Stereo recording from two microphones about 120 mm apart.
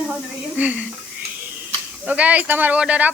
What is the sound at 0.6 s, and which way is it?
Speech, 10° right (ahead or behind).